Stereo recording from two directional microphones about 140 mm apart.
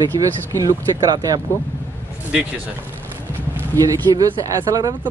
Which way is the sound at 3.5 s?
25° right (ahead or behind).